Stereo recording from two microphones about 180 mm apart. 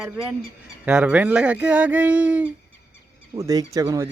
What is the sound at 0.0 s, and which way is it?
Speech, 5° right (ahead or behind).